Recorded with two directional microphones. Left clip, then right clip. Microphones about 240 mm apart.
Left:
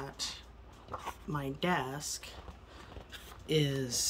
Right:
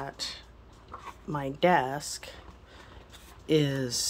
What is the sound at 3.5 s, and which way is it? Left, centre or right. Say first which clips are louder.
Speech: right 5 dB; centre.